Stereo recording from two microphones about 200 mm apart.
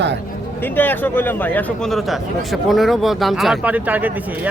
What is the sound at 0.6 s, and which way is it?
A man's voice, 10° left (ahead or behind).